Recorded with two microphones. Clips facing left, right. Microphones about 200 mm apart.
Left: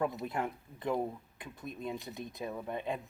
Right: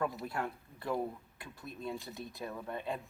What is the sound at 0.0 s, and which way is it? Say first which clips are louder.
Speech: left 2 dB; 20° left (ahead or behind).